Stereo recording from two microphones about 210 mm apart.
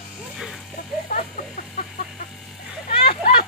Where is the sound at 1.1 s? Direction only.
40° left (ahead or behind).